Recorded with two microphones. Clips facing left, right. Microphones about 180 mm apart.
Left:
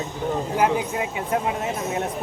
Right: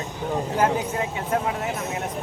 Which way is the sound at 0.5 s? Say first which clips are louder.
Left 1 dB; 15° left (ahead or behind).